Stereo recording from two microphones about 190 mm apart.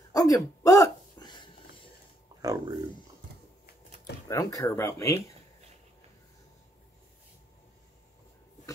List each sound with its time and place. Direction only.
0.1 s a sound: 20° left (ahead or behind)
2.4 s speech: 20° right (ahead or behind)
4.3 s speech: 15° left (ahead or behind)